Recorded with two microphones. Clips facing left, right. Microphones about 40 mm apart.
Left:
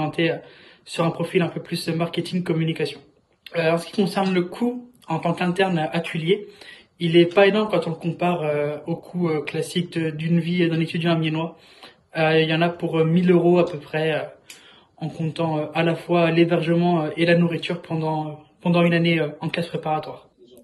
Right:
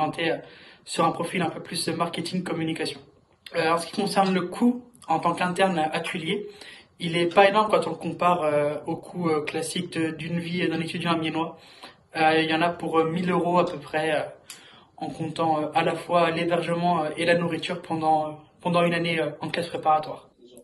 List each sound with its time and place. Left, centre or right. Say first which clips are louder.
0.0 s speech: left 3 dB; left
6.6 s a sound: left 6 dB; left
7.4 s speech: left 1 dB; left
8.5 s speech: even; left
12.1 s speech: left 2 dB; left
12.4 s speech: left 2 dB; left